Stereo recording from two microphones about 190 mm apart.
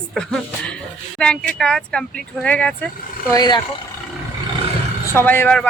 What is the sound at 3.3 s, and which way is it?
Speech, 20° left (ahead or behind).